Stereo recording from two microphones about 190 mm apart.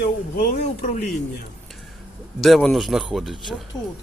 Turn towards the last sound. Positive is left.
turn(degrees=20)  # may be behind; listen again after turning